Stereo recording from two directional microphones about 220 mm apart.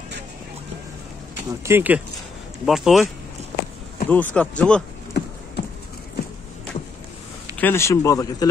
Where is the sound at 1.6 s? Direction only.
10° right (ahead or behind); by 4.5 s 5° left (ahead or behind).